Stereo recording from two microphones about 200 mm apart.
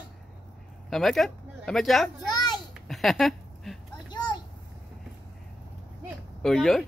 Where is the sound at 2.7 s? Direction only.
Centre (ahead or behind).